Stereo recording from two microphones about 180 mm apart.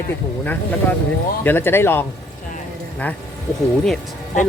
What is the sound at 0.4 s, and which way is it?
Speech, 10° left (ahead or behind).